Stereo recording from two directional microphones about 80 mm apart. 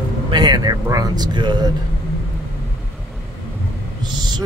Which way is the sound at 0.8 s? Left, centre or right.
Right.